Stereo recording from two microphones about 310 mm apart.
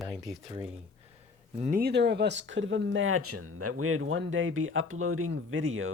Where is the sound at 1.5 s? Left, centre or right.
Right.